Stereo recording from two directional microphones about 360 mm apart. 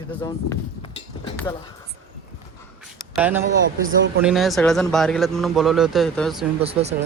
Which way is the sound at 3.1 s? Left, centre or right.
Centre.